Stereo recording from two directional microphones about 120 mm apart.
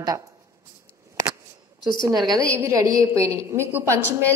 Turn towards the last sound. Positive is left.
turn(degrees=-20)  # may be behind; listen again after turning